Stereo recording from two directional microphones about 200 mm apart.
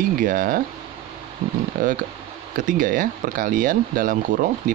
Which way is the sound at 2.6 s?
40° right (ahead or behind).